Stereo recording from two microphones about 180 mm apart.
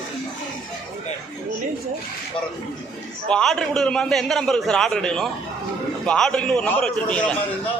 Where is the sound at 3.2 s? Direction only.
5° left (ahead or behind).